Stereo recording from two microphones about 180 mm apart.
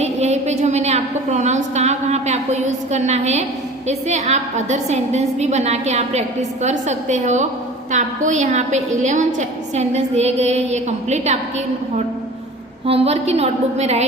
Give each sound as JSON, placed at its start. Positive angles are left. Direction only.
{"t": 0.0, "sound": "a sound", "side_deg": -40}
{"t": 3.8, "sound": "a woman's voice", "side_deg": -40}
{"t": 12.8, "sound": "a woman's voice", "side_deg": -35}